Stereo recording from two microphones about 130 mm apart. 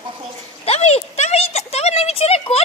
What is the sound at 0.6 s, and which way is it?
Speech, 55° left (ahead or behind).